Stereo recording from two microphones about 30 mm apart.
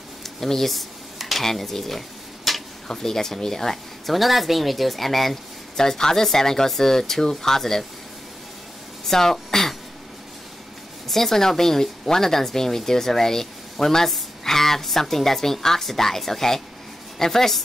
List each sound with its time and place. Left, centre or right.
0.2 s speech: centre
1.1 s a sound: centre
1.4 s speech: centre
2.9 s speech: centre
4.0 s speech: centre
5.8 s speech: centre
9.0 s a woman's voice: centre
11.1 s speech: centre